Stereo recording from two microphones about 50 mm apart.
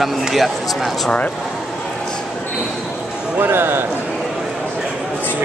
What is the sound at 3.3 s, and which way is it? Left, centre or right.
Speech, right.